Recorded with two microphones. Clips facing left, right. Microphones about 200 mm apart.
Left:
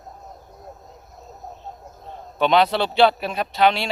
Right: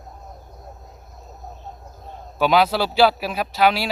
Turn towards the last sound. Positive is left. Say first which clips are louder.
# even
turn(degrees=-5)  # may be behind; listen again after turning